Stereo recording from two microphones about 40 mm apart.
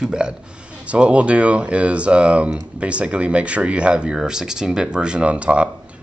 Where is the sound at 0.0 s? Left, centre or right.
Right.